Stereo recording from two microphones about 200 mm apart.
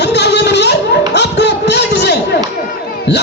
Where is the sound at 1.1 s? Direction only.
60° left (ahead or behind).